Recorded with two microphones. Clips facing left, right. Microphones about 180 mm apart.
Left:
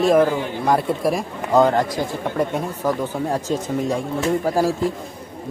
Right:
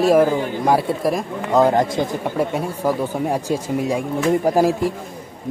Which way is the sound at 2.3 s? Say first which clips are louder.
Right 1 dB; 10° right (ahead or behind).